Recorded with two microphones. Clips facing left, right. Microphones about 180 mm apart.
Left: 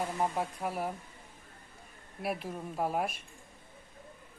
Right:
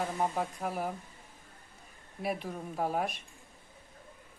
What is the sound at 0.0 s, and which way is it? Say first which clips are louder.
Speech: even; centre (ahead or behind).